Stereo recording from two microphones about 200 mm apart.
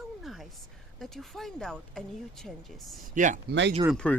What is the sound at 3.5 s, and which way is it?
Speech, 60° right (ahead or behind).